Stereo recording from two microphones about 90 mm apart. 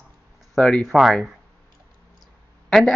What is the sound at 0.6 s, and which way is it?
Speech, 10° left (ahead or behind).